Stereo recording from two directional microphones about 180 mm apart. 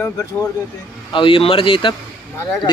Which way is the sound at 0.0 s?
20° left (ahead or behind).